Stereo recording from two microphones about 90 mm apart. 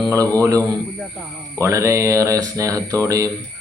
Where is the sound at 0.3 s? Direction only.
40° right (ahead or behind).